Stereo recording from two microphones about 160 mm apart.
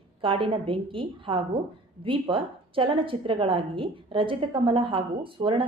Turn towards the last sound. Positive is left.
turn(degrees=-35)  # may be behind; listen again after turning